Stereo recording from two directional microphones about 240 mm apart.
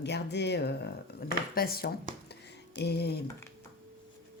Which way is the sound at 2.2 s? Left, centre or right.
Left.